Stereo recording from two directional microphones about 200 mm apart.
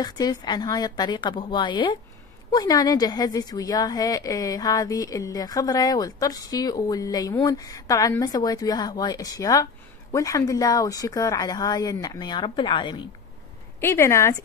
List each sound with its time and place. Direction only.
0.0 s a woman's voice: 20° left (ahead or behind)
13.7 s speech: 10° left (ahead or behind)